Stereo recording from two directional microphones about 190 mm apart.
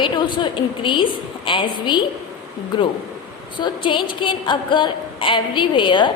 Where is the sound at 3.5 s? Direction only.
25° left (ahead or behind).